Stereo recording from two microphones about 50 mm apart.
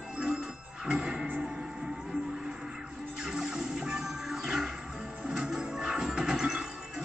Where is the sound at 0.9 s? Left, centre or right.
Centre.